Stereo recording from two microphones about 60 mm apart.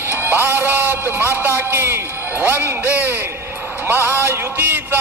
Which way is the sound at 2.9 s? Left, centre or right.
Right.